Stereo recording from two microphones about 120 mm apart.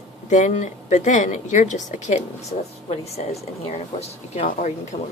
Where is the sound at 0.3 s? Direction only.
90° left.